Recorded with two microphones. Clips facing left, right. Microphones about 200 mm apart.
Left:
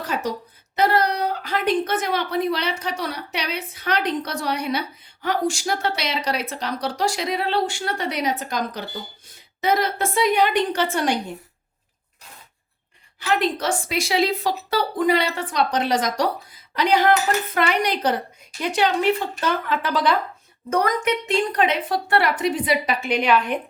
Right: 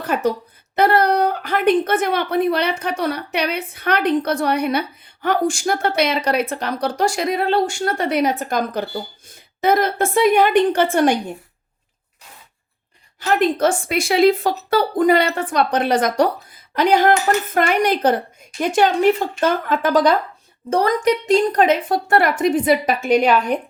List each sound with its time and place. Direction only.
0.0 s speech: 55° right (ahead or behind)
13.1 s speech: 45° right (ahead or behind)
20.7 s speech: 30° right (ahead or behind)